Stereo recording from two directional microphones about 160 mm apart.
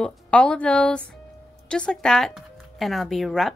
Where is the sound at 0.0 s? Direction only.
5° left (ahead or behind).